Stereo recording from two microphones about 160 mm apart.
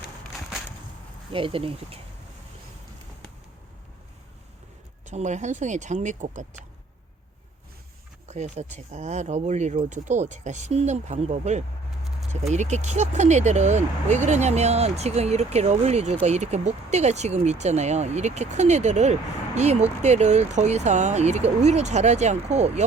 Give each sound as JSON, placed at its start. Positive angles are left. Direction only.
{"t": 1.3, "sound": "speech", "side_deg": -35}
{"t": 5.0, "sound": "speech", "side_deg": -45}
{"t": 8.3, "sound": "speech", "side_deg": -45}